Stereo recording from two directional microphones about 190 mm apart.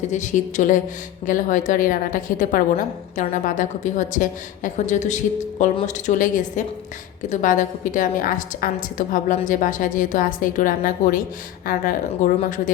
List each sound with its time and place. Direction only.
0.1 s a woman's voice: 40° left (ahead or behind)